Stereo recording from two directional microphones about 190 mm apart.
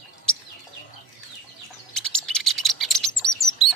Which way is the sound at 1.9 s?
5° left (ahead or behind).